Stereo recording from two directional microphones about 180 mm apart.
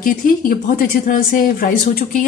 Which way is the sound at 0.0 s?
50° left (ahead or behind).